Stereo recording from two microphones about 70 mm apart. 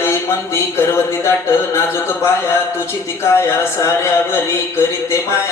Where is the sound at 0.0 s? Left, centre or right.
Left.